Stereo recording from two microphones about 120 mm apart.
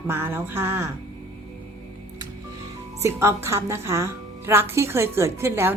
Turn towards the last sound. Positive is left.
turn(degrees=-20)  # may be behind; listen again after turning